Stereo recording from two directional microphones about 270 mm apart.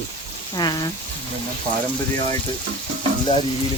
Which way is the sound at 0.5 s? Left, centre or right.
Centre.